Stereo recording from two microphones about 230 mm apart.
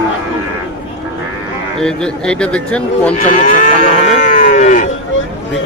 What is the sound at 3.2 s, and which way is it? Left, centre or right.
Moo, left.